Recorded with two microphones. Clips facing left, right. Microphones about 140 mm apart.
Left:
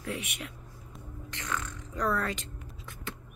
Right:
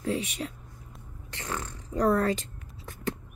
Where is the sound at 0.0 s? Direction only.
30° right (ahead or behind).